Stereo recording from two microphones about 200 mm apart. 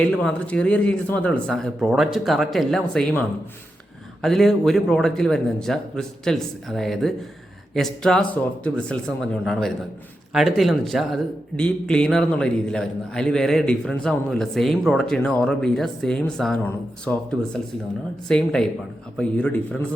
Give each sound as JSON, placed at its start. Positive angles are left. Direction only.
{"t": 0.0, "sound": "a man's voice", "side_deg": 5}